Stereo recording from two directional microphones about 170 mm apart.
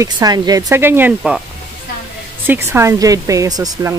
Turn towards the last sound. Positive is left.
turn(degrees=-20)  # may be behind; listen again after turning